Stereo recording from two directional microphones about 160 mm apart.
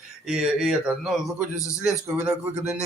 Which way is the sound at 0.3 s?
5° right (ahead or behind).